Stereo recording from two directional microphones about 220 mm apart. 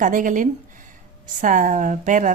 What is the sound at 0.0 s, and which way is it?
A woman's voice, 35° right (ahead or behind).